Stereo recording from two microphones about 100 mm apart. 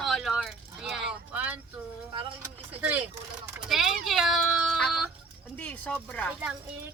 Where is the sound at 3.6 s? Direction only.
5° right (ahead or behind).